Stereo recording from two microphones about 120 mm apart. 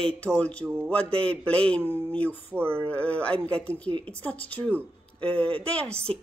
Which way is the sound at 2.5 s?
20° right (ahead or behind).